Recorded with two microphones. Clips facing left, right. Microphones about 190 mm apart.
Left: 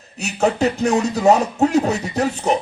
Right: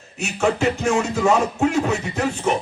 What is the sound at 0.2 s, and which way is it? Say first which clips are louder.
Music: left 2 dB; 40° left (ahead or behind).